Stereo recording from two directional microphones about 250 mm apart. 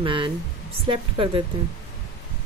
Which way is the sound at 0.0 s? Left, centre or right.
Right.